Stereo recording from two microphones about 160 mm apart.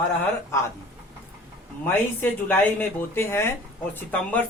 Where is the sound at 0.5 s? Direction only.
15° left (ahead or behind).